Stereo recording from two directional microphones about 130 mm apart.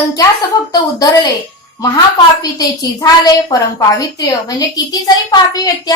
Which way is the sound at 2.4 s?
30° left (ahead or behind).